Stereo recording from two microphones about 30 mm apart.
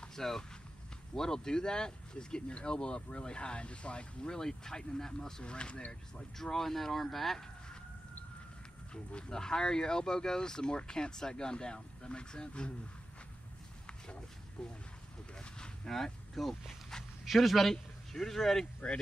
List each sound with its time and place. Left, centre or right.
0.1 s speech: centre; by 4.3 s left
4.3 s speech: centre
5.4 s speech: left
6.3 s speech: centre
8.9 s speech: left
14.6 s speech: left
15.3 s cattle: left
15.9 s speech: centre
17.2 s speech: centre